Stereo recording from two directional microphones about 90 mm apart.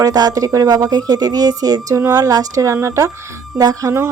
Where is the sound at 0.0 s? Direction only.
40° right (ahead or behind).